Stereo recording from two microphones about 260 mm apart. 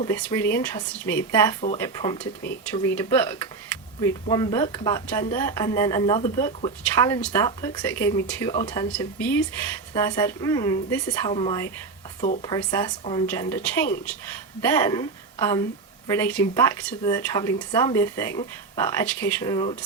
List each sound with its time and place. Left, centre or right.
0.1 s a woman's voice: centre